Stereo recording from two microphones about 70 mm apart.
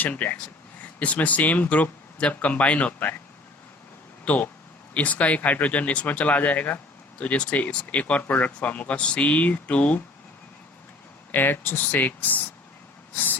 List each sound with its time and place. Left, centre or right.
0.0 s speech: left
4.3 s speech: left
11.3 s speech: left